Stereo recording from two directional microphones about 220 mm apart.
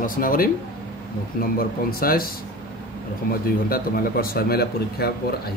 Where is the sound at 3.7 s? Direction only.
40° left (ahead or behind).